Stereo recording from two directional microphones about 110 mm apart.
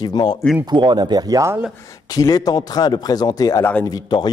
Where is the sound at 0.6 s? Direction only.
40° right (ahead or behind); by 1.6 s 25° right (ahead or behind).